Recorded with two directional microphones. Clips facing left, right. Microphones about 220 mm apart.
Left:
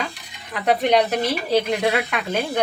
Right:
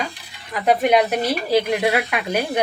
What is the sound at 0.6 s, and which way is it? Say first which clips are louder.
Speech: right 1 dB; 5° right (ahead or behind).